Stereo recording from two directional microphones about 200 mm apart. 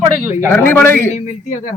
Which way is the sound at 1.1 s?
35° left (ahead or behind).